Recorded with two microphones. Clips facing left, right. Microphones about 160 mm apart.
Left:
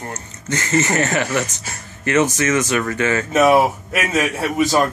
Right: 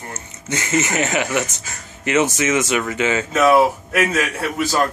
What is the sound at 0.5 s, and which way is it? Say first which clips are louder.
Speech: left 2 dB; 15° right (ahead or behind).